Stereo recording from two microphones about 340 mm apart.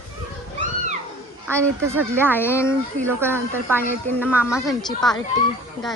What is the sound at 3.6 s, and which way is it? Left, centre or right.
A woman's voice, centre.